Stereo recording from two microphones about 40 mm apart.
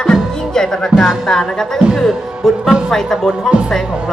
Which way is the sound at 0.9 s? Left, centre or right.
Centre.